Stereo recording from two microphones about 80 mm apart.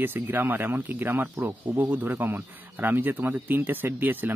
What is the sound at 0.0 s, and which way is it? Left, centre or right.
Speech, right.